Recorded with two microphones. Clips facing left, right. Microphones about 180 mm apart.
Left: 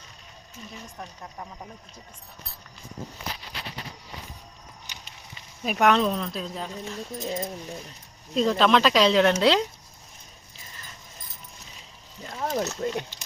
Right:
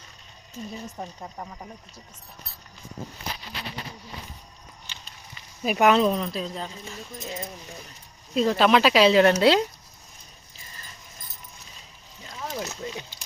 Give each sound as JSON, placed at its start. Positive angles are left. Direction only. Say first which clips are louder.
{"t": 0.9, "sound": "speech", "louder": "right 3 dB", "side_deg": -10}
{"t": 5.6, "sound": "speech", "louder": "right 2 dB", "side_deg": -5}
{"t": 7.2, "sound": "speech", "louder": "left 5 dB", "side_deg": 30}
{"t": 8.4, "sound": "speech", "louder": "right 1 dB", "side_deg": -5}
{"t": 12.3, "sound": "a sound", "louder": "left 5 dB", "side_deg": 45}